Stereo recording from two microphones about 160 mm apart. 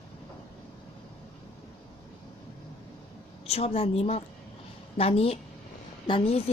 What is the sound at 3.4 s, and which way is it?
A woman's voice, 40° left (ahead or behind).